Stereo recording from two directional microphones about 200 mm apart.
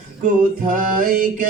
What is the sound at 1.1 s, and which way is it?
Mantra, 45° right (ahead or behind).